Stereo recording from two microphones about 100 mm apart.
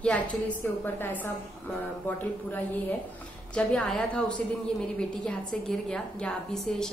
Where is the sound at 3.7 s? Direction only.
5° left (ahead or behind).